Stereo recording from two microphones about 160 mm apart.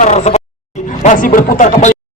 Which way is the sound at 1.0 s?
55° left (ahead or behind).